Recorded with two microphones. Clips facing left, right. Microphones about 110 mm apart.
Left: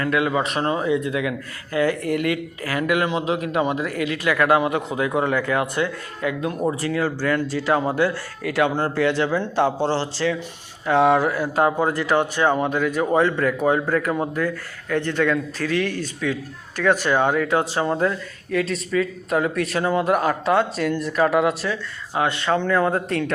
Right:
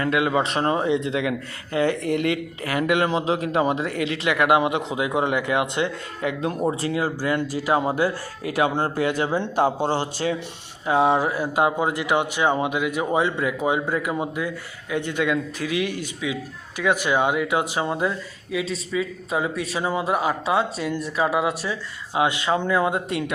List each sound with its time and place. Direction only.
0.0 s speech: 25° right (ahead or behind)
11.5 s speech: 15° right (ahead or behind)